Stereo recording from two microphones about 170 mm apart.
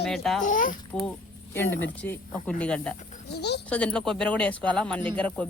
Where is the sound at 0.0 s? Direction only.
Centre (ahead or behind).